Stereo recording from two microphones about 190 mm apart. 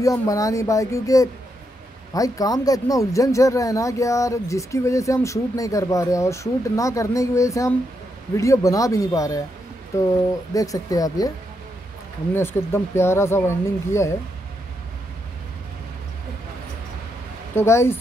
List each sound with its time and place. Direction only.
0.0 s speech: 15° left (ahead or behind)
12.4 s speech: 15° left (ahead or behind)
17.6 s speech: 15° left (ahead or behind)